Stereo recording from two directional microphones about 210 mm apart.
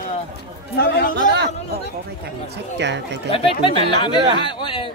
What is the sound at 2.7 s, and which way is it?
Speech, 55° right (ahead or behind).